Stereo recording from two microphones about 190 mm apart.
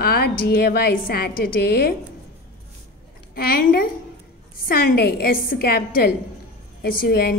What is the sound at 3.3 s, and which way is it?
A woman's voice, 50° left (ahead or behind).